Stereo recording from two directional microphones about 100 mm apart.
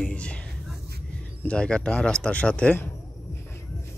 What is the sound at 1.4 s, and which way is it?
Speech, 10° left (ahead or behind).